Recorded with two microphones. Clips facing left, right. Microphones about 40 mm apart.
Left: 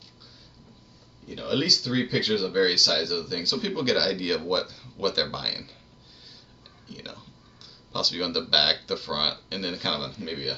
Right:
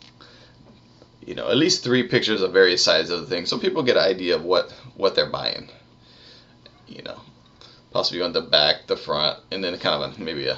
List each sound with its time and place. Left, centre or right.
1.2 s speech: right
6.9 s burping: right
7.9 s speech: right